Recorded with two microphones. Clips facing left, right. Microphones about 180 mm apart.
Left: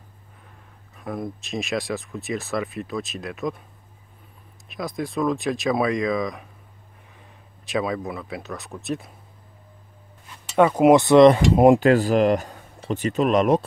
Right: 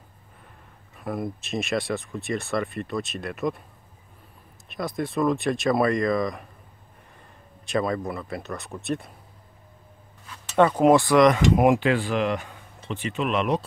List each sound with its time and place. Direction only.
0.9 s speech: centre (ahead or behind)
4.6 s speech: centre (ahead or behind)
7.6 s speech: centre (ahead or behind)
10.5 s speech: 10° left (ahead or behind); by 11.8 s 30° left (ahead or behind)
11.8 s speech: 40° left (ahead or behind)